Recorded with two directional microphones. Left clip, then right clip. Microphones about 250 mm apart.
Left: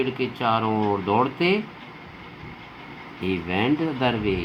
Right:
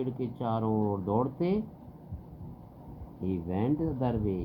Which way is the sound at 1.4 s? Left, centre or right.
Centre.